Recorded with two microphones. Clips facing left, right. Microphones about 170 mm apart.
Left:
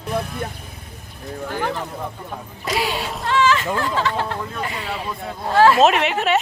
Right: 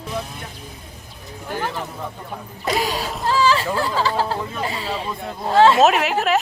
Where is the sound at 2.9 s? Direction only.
Centre (ahead or behind).